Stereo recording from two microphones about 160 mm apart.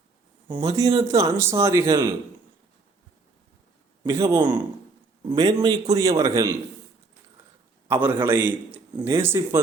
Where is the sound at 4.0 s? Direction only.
20° right (ahead or behind).